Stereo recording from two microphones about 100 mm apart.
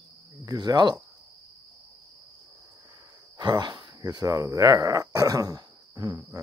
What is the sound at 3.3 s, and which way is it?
Speech, 45° right (ahead or behind).